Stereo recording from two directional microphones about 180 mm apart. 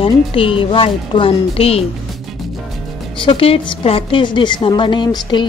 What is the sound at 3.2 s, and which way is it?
A woman's voice, 30° left (ahead or behind).